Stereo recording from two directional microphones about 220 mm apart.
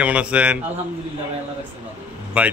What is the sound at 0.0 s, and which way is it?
Speech, 5° right (ahead or behind).